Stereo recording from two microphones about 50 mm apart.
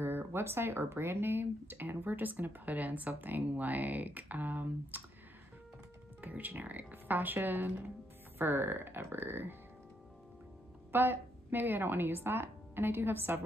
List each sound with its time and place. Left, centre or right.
0.0 s speech: right
6.2 s speech: right
10.9 s a woman's voice: right